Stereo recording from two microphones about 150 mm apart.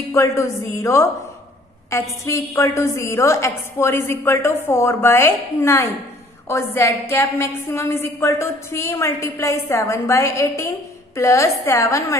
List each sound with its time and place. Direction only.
0.1 s a woman's voice: 20° left (ahead or behind)